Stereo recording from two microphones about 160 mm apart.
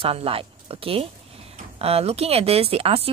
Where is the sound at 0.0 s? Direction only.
35° right (ahead or behind).